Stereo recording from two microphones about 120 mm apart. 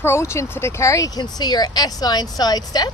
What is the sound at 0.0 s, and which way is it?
Speech, 20° left (ahead or behind).